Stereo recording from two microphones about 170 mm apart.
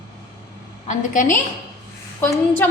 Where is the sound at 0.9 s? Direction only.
50° left (ahead or behind).